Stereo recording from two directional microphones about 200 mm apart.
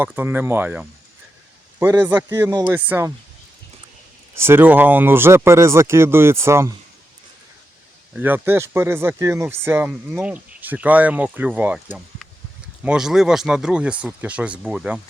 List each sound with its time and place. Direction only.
0.0 s speech: 10° right (ahead or behind)
4.4 s speech: 10° right (ahead or behind)
8.1 s speech: 10° right (ahead or behind)